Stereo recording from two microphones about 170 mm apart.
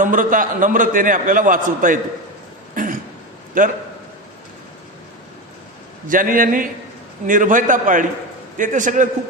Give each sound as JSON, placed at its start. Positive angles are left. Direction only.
{"t": 0.0, "sound": "a man's voice", "side_deg": -50}
{"t": 2.7, "sound": "cough", "side_deg": -50}
{"t": 3.6, "sound": "a man's voice", "side_deg": -50}
{"t": 6.1, "sound": "a man's voice", "side_deg": -55}